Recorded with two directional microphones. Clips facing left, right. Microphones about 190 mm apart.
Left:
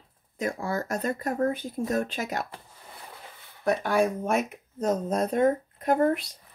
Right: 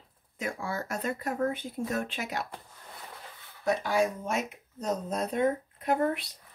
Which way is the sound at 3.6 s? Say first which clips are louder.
Left 3 dB; 55° left (ahead or behind).